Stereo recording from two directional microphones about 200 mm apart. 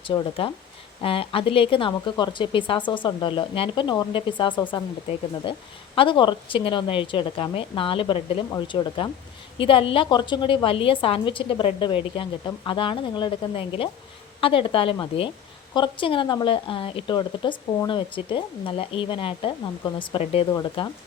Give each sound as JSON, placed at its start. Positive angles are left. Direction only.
{"t": 0.0, "sound": "a woman's voice", "side_deg": 25}